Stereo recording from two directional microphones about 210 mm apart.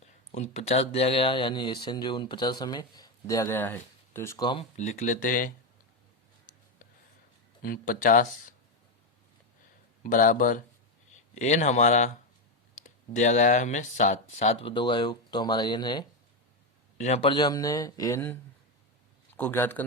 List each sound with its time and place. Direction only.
0.0 s speech: 30° left (ahead or behind)
4.8 s speech: 35° left (ahead or behind)
7.6 s speech: 40° left (ahead or behind)
10.0 s a man's voice: 40° left (ahead or behind); by 18.3 s 10° left (ahead or behind)
19.4 s a man's voice: 10° left (ahead or behind)